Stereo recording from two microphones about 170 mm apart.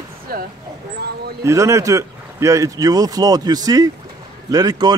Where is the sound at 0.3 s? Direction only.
60° right (ahead or behind).